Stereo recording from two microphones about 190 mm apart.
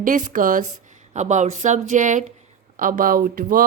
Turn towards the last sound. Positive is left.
turn(degrees=-45)  # may be behind; listen again after turning